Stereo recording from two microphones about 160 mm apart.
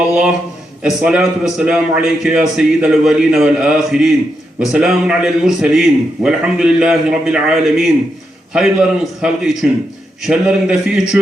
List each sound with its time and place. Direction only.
0.1 s a man's voice: 5° right (ahead or behind)